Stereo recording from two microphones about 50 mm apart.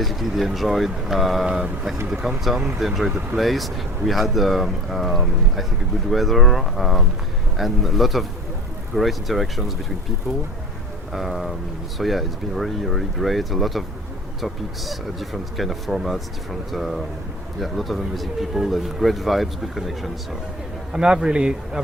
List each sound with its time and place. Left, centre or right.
0.0 s speech: centre
1.5 s a man's voice: centre
11.1 s speech: centre
20.9 s a man's voice: centre